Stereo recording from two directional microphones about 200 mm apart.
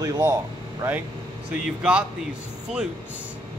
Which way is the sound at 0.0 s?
20° right (ahead or behind).